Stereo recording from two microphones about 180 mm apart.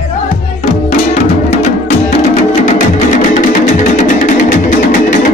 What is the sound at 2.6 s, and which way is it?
Music, 45° left (ahead or behind).